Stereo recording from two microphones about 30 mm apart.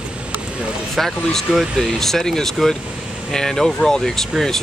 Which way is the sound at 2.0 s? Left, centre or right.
Centre.